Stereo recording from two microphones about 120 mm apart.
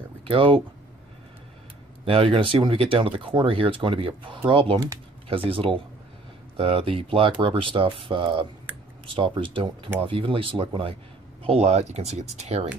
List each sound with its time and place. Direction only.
0.2 s speech: 50° right (ahead or behind)
2.0 s speech: 50° right (ahead or behind)
11.4 s speech: 60° right (ahead or behind)